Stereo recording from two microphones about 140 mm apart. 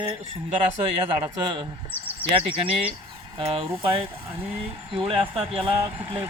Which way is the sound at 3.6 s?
40° right (ahead or behind).